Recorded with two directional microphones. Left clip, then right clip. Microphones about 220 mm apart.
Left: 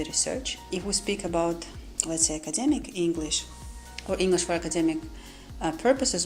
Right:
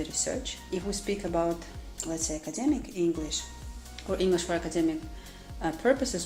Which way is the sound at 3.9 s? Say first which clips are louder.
Left 2 dB; 30° left (ahead or behind).